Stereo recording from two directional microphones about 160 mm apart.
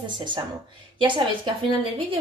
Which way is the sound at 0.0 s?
30° right (ahead or behind).